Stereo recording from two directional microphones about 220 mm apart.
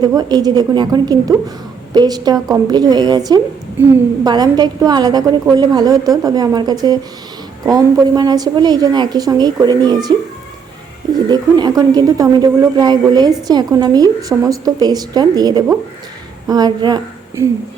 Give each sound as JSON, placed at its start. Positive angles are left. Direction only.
{"t": 0.0, "sound": "a woman's voice", "side_deg": -20}